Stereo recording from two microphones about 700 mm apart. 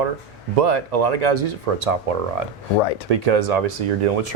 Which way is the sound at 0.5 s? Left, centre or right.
Right.